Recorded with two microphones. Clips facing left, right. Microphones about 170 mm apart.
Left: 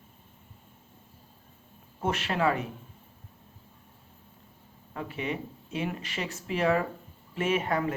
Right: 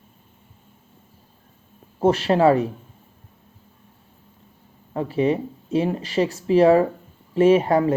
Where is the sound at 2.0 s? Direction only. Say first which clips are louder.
Right 11 dB; 35° right (ahead or behind).